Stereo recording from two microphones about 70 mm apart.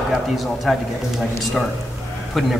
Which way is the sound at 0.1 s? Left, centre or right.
Centre.